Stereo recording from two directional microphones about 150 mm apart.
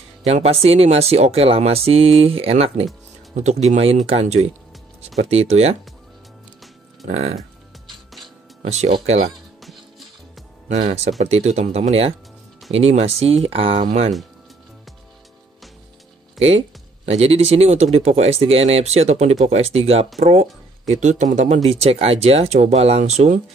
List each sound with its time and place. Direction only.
0.2 s speech: 45° right (ahead or behind)
7.1 s speech: 45° right (ahead or behind)
7.9 s music: centre (ahead or behind)
8.6 s speech: 45° right (ahead or behind)
9.6 s music: centre (ahead or behind)
10.7 s speech: 50° right (ahead or behind)
16.4 s speech: 45° right (ahead or behind)